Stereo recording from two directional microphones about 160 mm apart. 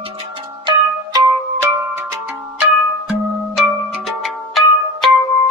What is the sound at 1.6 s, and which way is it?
Music, 15° right (ahead or behind).